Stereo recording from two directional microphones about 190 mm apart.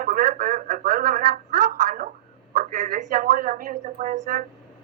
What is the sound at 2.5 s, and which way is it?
Speech, 40° right (ahead or behind).